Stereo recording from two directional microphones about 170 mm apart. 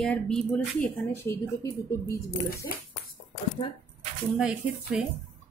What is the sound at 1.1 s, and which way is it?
Speech, 15° left (ahead or behind).